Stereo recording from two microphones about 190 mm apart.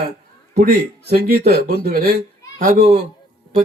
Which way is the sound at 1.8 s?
55° right (ahead or behind).